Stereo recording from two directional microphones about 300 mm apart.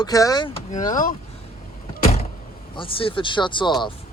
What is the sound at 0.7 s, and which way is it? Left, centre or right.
Speech, left.